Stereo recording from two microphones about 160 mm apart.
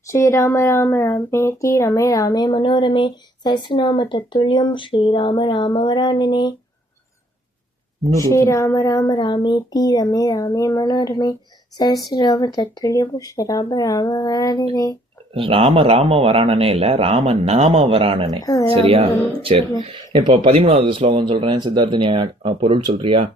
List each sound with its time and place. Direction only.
0.1 s speech: 20° left (ahead or behind)
8.3 s speech: 20° left (ahead or behind)
15.4 s speech: 35° right (ahead or behind)